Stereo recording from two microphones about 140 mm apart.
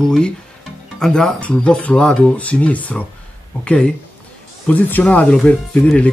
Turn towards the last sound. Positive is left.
turn(degrees=10)  # may be behind; listen again after turning